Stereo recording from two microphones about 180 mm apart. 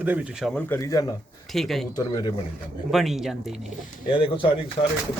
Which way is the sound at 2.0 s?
20° left (ahead or behind).